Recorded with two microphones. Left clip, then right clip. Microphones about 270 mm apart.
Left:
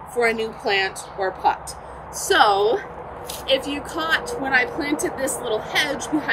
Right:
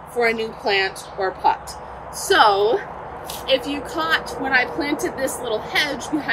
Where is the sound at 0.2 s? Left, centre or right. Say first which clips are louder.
Right 1 dB; centre.